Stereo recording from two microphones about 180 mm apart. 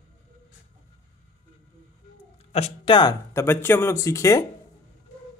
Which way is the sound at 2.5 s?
30° left (ahead or behind).